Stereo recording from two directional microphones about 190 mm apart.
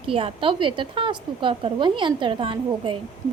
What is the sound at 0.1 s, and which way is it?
A woman's voice, 30° right (ahead or behind).